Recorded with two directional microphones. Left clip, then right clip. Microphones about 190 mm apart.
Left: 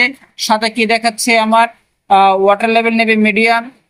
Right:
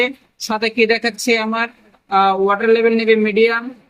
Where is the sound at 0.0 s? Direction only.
45° left (ahead or behind).